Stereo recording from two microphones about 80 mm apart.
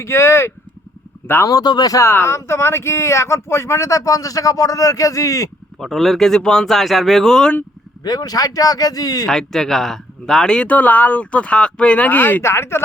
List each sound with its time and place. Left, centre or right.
0.0 s speech: left
1.5 s speech: left
2.0 s speech: left
5.8 s speech: centre
8.0 s speech: left
9.2 s speech: centre; by 12.8 s left